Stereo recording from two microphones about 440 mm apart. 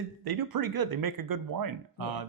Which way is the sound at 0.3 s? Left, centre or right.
Right.